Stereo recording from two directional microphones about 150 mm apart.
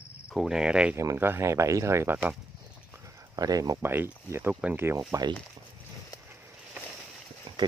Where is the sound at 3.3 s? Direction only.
25° right (ahead or behind).